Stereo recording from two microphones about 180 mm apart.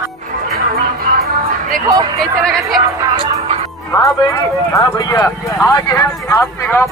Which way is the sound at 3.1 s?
25° right (ahead or behind).